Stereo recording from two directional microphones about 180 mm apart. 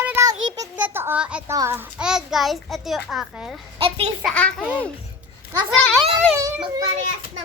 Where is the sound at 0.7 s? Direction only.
10° right (ahead or behind).